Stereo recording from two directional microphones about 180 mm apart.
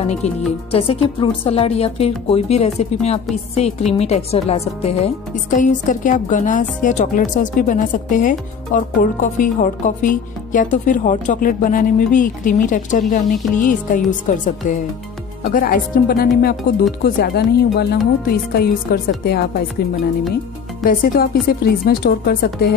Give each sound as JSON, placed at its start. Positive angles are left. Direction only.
{"t": 0.0, "sound": "a woman's voice", "side_deg": 35}
{"t": 20.8, "sound": "speech", "side_deg": 50}